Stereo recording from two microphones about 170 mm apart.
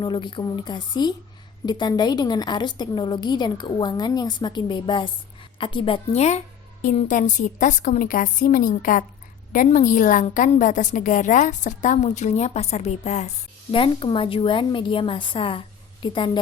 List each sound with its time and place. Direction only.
0.0 s a woman's voice: 30° left (ahead or behind)